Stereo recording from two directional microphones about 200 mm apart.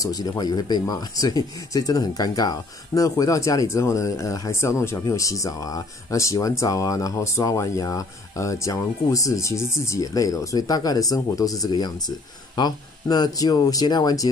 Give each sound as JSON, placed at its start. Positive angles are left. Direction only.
{"t": 0.0, "sound": "speech", "side_deg": 20}